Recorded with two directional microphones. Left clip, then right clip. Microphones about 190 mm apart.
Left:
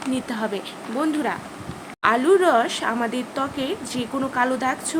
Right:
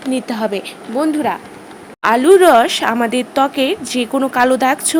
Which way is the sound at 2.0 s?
35° right (ahead or behind).